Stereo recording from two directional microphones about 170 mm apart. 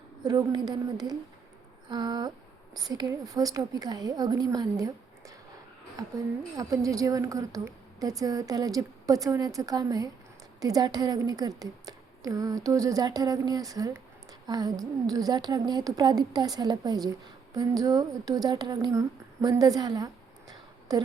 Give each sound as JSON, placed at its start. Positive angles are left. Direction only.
{"t": 0.2, "sound": "a woman's voice", "side_deg": -25}
{"t": 6.6, "sound": "a woman's voice", "side_deg": -20}
{"t": 20.5, "sound": "a sound", "side_deg": -20}